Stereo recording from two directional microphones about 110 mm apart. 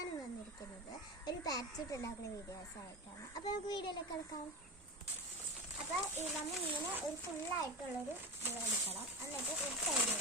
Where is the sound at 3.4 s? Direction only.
40° left (ahead or behind).